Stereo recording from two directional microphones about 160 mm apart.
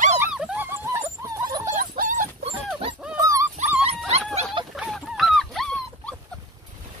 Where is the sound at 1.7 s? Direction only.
60° right (ahead or behind).